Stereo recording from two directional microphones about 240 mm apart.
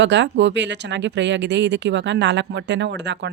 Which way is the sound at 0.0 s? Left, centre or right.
Right.